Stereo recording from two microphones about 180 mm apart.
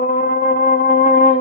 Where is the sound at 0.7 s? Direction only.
50° left (ahead or behind).